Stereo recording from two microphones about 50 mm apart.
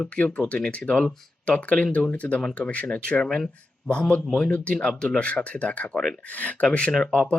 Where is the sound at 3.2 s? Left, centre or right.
Centre.